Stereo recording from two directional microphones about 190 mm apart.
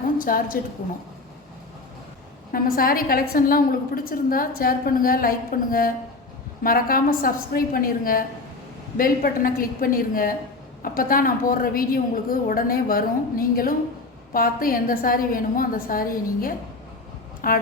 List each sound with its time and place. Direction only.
0.2 s a woman's voice: 50° left (ahead or behind)
2.5 s a woman's voice: 50° left (ahead or behind)